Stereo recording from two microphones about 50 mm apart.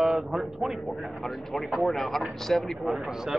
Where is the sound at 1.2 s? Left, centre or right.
Centre.